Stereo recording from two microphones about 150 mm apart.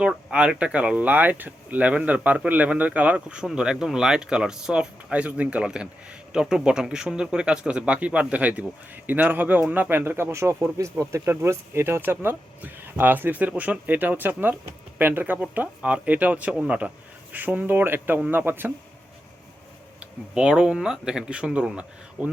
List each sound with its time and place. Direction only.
0.0 s speech: 5° right (ahead or behind)
20.0 s speech: 5° right (ahead or behind)